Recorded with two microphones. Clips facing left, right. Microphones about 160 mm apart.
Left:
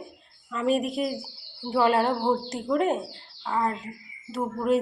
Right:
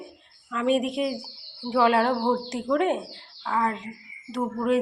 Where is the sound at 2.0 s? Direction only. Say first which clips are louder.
Right 1 dB; 5° left (ahead or behind).